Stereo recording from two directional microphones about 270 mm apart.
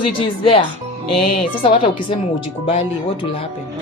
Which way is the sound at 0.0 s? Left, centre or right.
Centre.